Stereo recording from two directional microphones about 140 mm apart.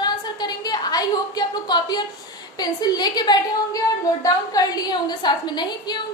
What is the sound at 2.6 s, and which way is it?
A woman's voice, 30° left (ahead or behind).